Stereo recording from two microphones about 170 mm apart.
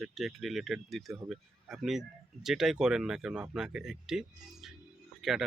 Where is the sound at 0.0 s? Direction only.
Centre (ahead or behind).